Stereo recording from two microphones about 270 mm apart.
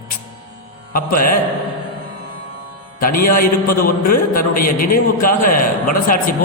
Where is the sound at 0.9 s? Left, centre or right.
Left.